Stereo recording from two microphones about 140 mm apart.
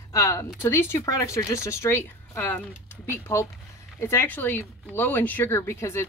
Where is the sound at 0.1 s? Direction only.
25° left (ahead or behind).